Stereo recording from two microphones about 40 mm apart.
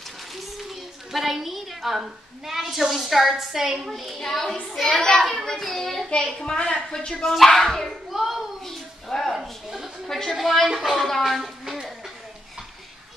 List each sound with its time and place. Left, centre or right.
0.6 s a woman's voice: centre
6.0 s a child's voice: left
7.2 s a child's voice: centre
8.1 s children playing: centre
8.6 s a sound: centre
9.3 s a sound: centre
10.0 s a woman's voice: centre
11.6 s music: centre